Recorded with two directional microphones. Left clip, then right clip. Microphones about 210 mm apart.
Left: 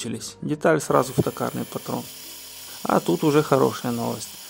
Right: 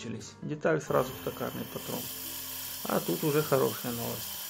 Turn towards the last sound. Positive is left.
turn(degrees=40)  # may be behind; listen again after turning